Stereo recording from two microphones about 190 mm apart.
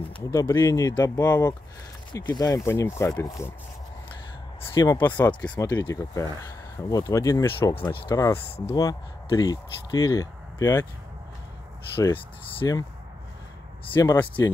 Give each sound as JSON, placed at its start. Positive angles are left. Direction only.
{"t": 0.3, "sound": "speech", "side_deg": 15}
{"t": 4.7, "sound": "speech", "side_deg": 25}
{"t": 5.0, "sound": "speech", "side_deg": 10}
{"t": 11.9, "sound": "speech", "side_deg": 15}
{"t": 13.9, "sound": "speech", "side_deg": 10}
{"t": 14.2, "sound": "speech", "side_deg": 25}